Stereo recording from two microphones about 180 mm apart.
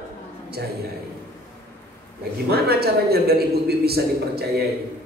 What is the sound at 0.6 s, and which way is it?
Speech, 65° right (ahead or behind).